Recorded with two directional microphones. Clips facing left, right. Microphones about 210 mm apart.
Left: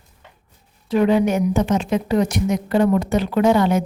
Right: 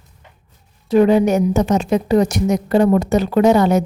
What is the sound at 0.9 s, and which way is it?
A woman's voice, 40° right (ahead or behind).